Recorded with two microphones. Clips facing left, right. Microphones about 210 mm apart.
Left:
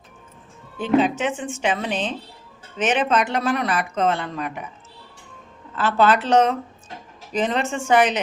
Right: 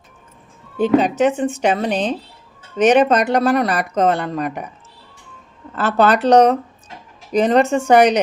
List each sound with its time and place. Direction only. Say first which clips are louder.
0.8 s speech: right 5 dB; 40° right (ahead or behind)
5.8 s speech: right 4 dB; 40° right (ahead or behind)